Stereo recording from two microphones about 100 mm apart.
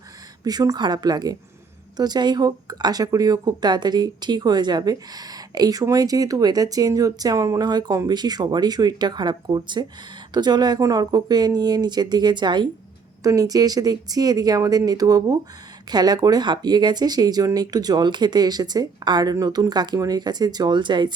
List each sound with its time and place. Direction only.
0.4 s speech: 40° right (ahead or behind)
13.2 s speech: 35° right (ahead or behind)